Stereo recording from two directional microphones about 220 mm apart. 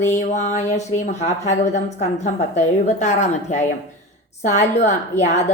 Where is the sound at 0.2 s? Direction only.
30° left (ahead or behind).